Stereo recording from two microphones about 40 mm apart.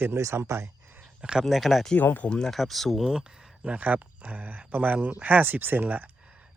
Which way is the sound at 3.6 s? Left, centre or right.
Right.